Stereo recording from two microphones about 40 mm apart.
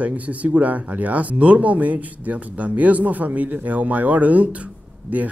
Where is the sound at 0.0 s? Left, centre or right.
Right.